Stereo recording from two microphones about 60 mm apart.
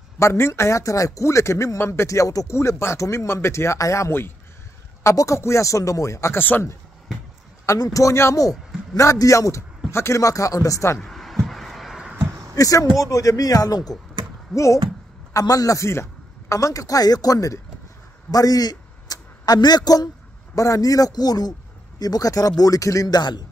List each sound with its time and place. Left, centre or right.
0.2 s speech: left
2.5 s speech: left
5.1 s speech: left
6.3 s speech: left
7.6 s speech: left
10.2 s speech: left
11.0 s a sound: centre
12.5 s speech: left
14.5 s speech: left
15.3 s speech: left
15.9 s speech: left
18.3 s a man's voice: left
20.5 s speech: left